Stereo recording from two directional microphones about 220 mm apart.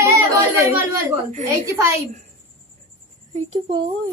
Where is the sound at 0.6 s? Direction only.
15° right (ahead or behind).